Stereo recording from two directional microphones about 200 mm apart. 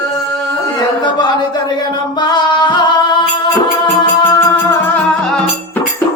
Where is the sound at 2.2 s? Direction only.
20° left (ahead or behind).